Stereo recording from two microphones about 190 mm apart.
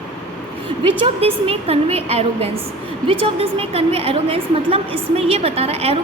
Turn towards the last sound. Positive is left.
turn(degrees=-30)  # may be behind; listen again after turning